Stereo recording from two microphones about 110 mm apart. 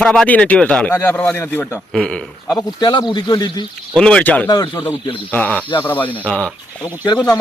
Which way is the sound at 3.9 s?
10° left (ahead or behind).